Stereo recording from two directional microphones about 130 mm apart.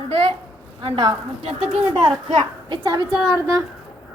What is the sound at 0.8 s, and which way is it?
Speech, 35° right (ahead or behind).